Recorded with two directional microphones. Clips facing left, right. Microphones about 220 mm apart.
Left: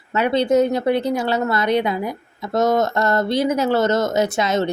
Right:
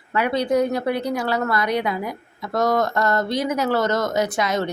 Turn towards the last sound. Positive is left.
turn(degrees=25)  # may be behind; listen again after turning